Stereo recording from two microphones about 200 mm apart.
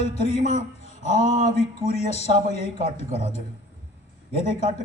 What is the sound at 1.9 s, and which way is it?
Speech, 35° left (ahead or behind).